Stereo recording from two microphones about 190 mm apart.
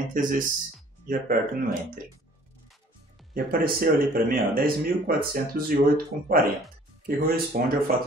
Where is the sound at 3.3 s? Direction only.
50° right (ahead or behind).